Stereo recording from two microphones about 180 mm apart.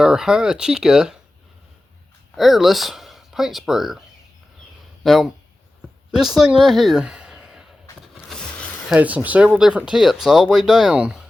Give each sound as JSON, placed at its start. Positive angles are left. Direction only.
{"t": 0.0, "sound": "speech", "side_deg": -5}
{"t": 2.3, "sound": "speech", "side_deg": 0}
{"t": 5.0, "sound": "speech", "side_deg": 0}
{"t": 7.9, "sound": "a sound", "side_deg": 15}
{"t": 8.9, "sound": "speech", "side_deg": -10}